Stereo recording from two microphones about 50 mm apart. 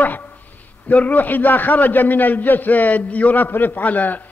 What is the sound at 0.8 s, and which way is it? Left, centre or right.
A man's voice, left.